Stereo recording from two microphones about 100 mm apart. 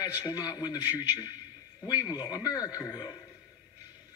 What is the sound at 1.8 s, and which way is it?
A man's voice, 40° left (ahead or behind).